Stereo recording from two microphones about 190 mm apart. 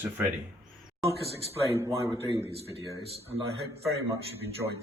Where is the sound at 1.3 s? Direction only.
30° right (ahead or behind).